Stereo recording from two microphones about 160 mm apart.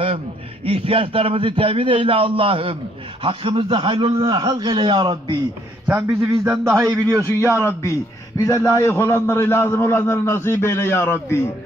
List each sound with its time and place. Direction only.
0.7 s a man's voice: 35° right (ahead or behind); by 7.7 s 15° right (ahead or behind)
7.8 s a man's voice: 20° left (ahead or behind)